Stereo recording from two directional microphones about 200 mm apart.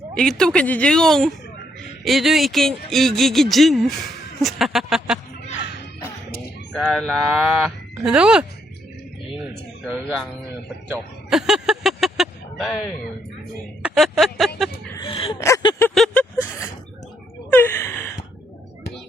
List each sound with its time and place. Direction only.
0.1 s speech: 5° left (ahead or behind)
6.7 s speech: 5° left (ahead or behind)
9.8 s speech: centre (ahead or behind)
11.3 s a sound: 5° right (ahead or behind)
13.8 s speech: centre (ahead or behind)
15.0 s a sound: 25° left (ahead or behind)
17.5 s gasp: 10° left (ahead or behind)